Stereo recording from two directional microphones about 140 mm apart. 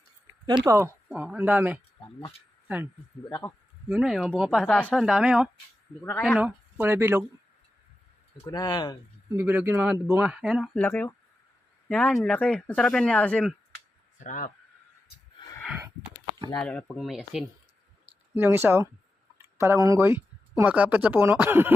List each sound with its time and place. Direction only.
0.6 s speech: 20° right (ahead or behind)
3.2 s speech: 20° left (ahead or behind)
3.8 s speech: 5° right (ahead or behind)
4.6 s speech: 10° left (ahead or behind)
6.0 s speech: 10° left (ahead or behind)
6.4 s speech: 15° right (ahead or behind)
8.4 s speech: 25° left (ahead or behind)
9.3 s speech: 15° right (ahead or behind)
10.8 s speech: 15° left (ahead or behind)
14.3 s speech: 70° left (ahead or behind)
15.4 s a sound: 25° left (ahead or behind)
16.6 s speech: 10° left (ahead or behind)
18.0 s a sound: 15° right (ahead or behind)
19.4 s speech: 20° right (ahead or behind)